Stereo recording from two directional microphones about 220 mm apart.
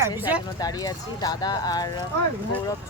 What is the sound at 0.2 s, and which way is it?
Speech, 5° right (ahead or behind).